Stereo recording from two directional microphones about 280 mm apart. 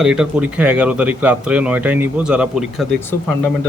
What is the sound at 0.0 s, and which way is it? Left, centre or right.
Speech, centre.